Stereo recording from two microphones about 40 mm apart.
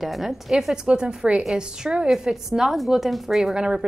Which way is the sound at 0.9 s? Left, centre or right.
Right.